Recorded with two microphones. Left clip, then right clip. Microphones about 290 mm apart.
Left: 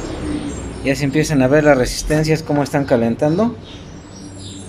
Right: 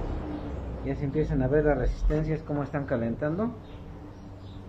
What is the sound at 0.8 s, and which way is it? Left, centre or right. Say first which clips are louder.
Speech: left 13 dB; left.